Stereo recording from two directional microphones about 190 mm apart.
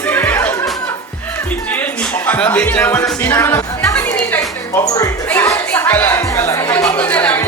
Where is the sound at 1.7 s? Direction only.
10° left (ahead or behind).